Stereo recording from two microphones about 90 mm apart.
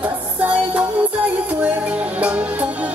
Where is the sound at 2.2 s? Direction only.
15° right (ahead or behind).